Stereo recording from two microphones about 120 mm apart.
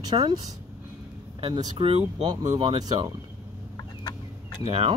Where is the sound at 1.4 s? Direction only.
40° right (ahead or behind).